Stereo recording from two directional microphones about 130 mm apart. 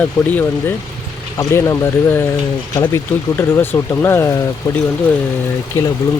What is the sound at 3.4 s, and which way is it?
Speech, 20° left (ahead or behind).